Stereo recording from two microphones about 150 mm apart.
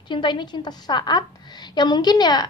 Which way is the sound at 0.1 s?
30° left (ahead or behind).